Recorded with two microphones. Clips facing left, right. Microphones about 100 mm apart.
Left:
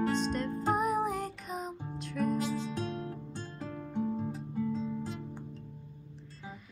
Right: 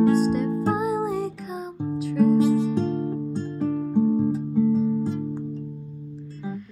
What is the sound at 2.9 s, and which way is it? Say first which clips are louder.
Music: right 13 dB; 35° right (ahead or behind).